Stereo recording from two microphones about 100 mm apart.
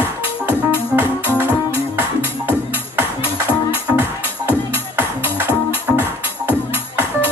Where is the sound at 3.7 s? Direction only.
20° right (ahead or behind).